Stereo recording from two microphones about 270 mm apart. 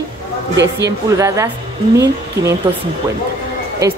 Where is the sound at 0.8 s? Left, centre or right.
Centre.